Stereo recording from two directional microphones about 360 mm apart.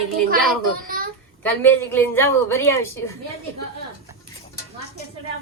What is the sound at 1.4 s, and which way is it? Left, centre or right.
A woman's voice, centre.